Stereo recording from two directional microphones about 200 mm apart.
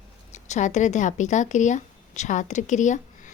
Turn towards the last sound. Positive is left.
turn(degrees=40)  # may be behind; listen again after turning